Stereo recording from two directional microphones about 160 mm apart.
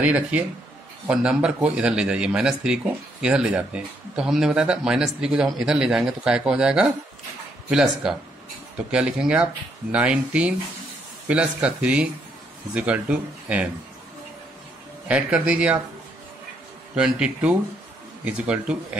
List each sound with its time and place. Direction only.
0.0 s a man's voice: 10° right (ahead or behind)
15.0 s speech: 5° right (ahead or behind)
16.9 s speech: 5° right (ahead or behind)